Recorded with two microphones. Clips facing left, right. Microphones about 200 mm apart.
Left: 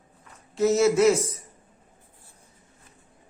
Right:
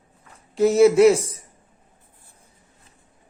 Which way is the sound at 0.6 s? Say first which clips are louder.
Right 6 dB; 35° right (ahead or behind).